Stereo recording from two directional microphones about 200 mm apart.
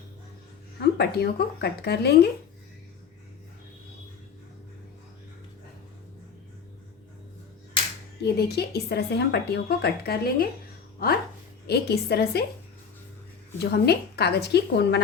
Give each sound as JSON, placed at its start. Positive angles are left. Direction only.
{"t": 0.8, "sound": "speech", "side_deg": 55}
{"t": 8.2, "sound": "speech", "side_deg": 55}
{"t": 11.6, "sound": "speech", "side_deg": 55}
{"t": 13.6, "sound": "a woman's voice", "side_deg": 55}